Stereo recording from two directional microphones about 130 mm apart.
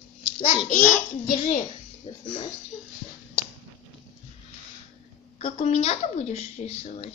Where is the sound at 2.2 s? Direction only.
70° left (ahead or behind).